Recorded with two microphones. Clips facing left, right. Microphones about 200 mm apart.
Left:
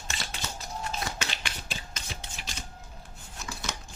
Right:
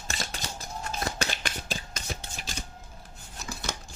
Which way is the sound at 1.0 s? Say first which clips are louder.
Right 3 dB; 40° right (ahead or behind).